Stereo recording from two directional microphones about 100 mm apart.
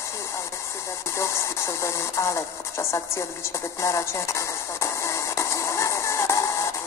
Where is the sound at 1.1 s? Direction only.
30° left (ahead or behind).